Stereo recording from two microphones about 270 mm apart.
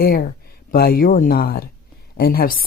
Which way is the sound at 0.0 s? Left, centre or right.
Left.